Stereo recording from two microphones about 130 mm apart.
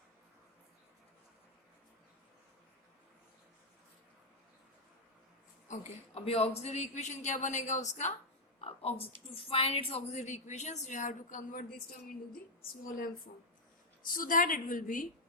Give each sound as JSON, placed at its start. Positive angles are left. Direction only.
{"t": 5.6, "sound": "a woman's voice", "side_deg": 65}
{"t": 8.6, "sound": "a woman's voice", "side_deg": 50}
{"t": 12.8, "sound": "a woman's voice", "side_deg": 90}